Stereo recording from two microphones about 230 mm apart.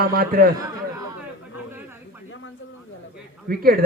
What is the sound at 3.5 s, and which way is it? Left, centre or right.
Speech, right.